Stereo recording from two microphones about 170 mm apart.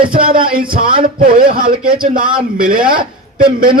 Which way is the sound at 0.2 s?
55° right (ahead or behind).